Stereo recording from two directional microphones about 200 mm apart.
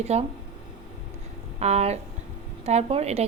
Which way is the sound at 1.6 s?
35° right (ahead or behind).